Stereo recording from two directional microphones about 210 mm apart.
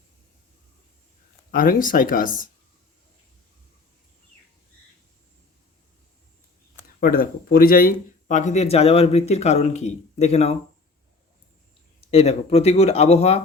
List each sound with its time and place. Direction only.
1.5 s speech: 40° left (ahead or behind)
7.0 s speech: 45° left (ahead or behind)
12.1 s speech: 30° left (ahead or behind)